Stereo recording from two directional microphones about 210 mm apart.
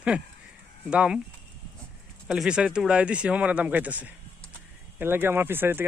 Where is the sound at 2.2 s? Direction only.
5° right (ahead or behind).